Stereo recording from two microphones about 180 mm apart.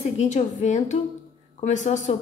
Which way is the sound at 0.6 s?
40° left (ahead or behind).